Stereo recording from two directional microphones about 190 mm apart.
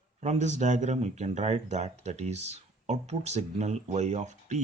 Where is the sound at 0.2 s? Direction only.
35° right (ahead or behind).